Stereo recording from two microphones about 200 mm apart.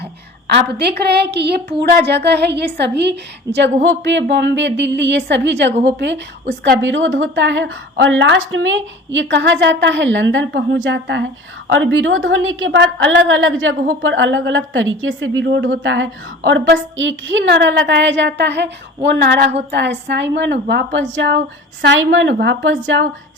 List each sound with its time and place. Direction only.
0.4 s a woman's voice: 55° right (ahead or behind)